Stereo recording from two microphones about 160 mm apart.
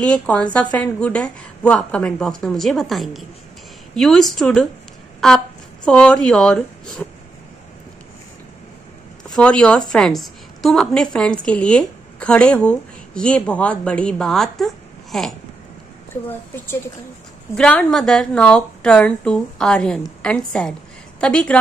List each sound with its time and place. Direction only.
0.0 s a woman's voice: 10° left (ahead or behind)
9.3 s a woman's voice: 5° left (ahead or behind)
16.3 s a woman's voice: 15° left (ahead or behind)